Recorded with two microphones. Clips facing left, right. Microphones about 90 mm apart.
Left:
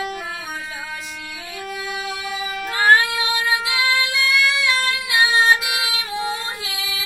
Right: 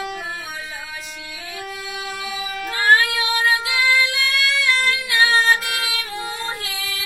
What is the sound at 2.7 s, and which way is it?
Music, 25° left (ahead or behind).